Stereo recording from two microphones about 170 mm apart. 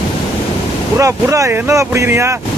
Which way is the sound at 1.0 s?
20° right (ahead or behind).